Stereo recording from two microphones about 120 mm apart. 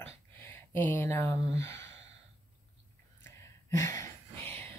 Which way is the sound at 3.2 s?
25° left (ahead or behind).